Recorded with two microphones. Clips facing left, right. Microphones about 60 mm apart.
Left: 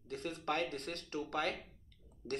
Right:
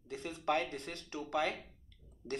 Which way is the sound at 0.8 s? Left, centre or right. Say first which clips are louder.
Left 2 dB; left.